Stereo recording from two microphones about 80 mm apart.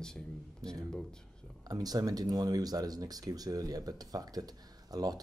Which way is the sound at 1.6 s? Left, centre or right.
Right.